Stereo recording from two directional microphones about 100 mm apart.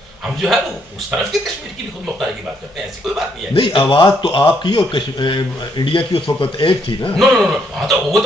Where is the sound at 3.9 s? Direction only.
55° left (ahead or behind).